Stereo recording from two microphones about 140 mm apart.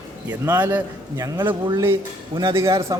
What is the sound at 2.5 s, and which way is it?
Speech, 20° right (ahead or behind).